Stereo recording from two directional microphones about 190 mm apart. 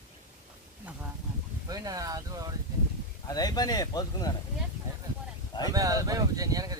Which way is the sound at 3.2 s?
20° left (ahead or behind).